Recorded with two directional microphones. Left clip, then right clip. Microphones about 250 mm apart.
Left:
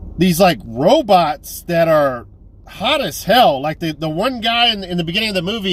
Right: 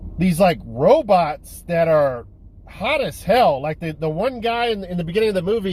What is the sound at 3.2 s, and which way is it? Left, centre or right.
Speech, left.